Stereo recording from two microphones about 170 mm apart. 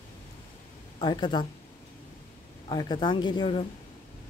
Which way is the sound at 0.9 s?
25° left (ahead or behind).